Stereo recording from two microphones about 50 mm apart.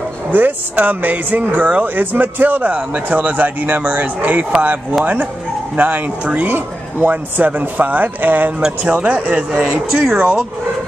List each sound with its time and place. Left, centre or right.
0.3 s speech: right
9.7 s speech: centre